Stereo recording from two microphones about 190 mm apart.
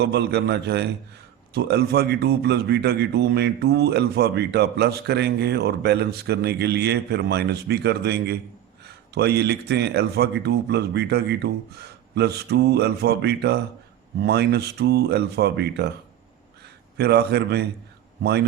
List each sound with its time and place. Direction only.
0.0 s a man's voice: 60° right (ahead or behind)
17.0 s a man's voice: 60° right (ahead or behind)